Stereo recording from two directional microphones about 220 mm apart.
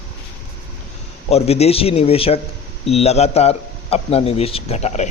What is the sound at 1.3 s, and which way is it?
Speech, 30° left (ahead or behind).